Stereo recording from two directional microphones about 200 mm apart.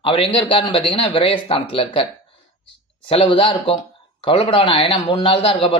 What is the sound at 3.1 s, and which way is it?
Speech, 25° left (ahead or behind).